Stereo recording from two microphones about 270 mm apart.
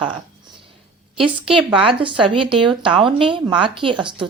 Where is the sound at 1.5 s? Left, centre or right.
Centre.